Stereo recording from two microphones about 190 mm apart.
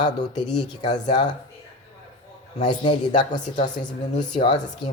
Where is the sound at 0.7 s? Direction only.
25° left (ahead or behind).